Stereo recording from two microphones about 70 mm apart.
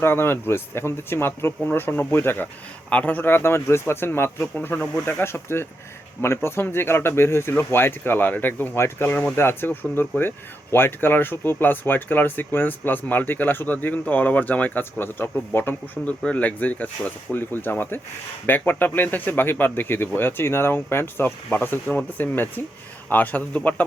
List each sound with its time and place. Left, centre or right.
0.0 s speech: left
2.9 s speech: left